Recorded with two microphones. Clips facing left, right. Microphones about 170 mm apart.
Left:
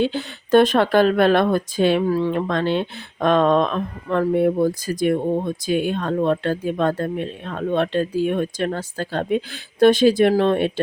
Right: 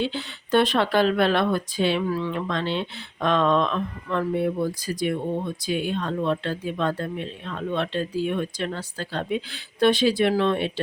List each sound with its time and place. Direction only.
0.0 s speech: 45° left (ahead or behind)